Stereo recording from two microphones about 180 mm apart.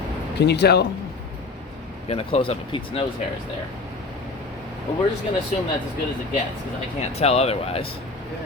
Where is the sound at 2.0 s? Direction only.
30° left (ahead or behind).